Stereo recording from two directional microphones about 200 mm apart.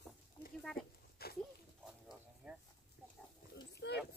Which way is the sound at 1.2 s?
50° left (ahead or behind).